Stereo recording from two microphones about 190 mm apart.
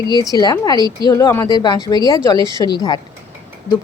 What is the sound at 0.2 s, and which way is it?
Speech, 20° left (ahead or behind).